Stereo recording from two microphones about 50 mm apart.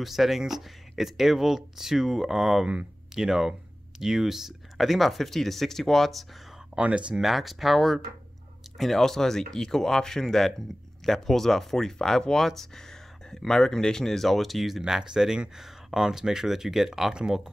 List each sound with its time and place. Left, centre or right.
0.0 s speech: centre
6.7 s speech: right
7.2 s speech: centre
14.8 s speech: centre